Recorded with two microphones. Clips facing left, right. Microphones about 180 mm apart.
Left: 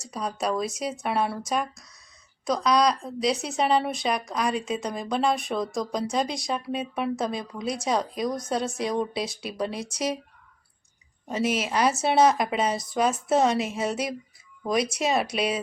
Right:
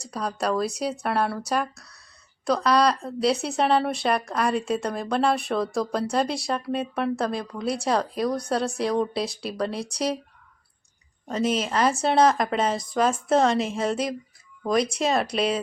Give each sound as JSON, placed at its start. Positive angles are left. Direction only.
{"t": 0.1, "sound": "a woman's voice", "side_deg": 0}
{"t": 1.7, "sound": "speech", "side_deg": -65}
{"t": 2.6, "sound": "a woman's voice", "side_deg": -5}
{"t": 11.3, "sound": "a woman's voice", "side_deg": 5}